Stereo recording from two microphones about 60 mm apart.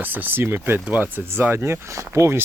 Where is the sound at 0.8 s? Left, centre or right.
Right.